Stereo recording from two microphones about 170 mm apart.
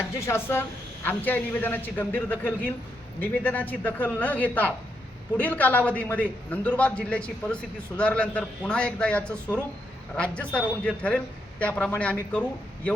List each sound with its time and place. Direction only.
0.0 s a man's voice: 15° left (ahead or behind)